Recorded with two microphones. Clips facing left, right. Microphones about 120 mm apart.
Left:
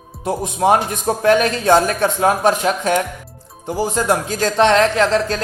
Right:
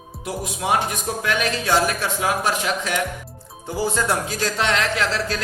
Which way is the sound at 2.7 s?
40° left (ahead or behind).